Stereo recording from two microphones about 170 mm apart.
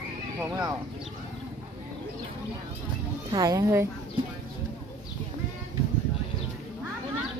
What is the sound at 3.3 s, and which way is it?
Speech, 20° right (ahead or behind).